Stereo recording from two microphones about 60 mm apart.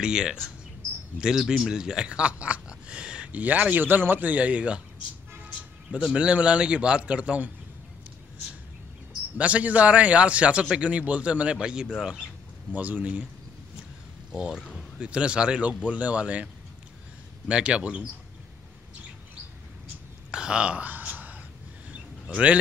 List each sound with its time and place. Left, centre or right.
0.0 s a man's voice: centre
9.4 s speech: right
12.7 s speech: right
14.3 s a man's voice: centre
17.5 s speech: centre
20.2 s a sound: centre
22.2 s speech: right